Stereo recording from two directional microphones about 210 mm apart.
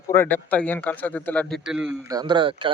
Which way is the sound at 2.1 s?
20° right (ahead or behind).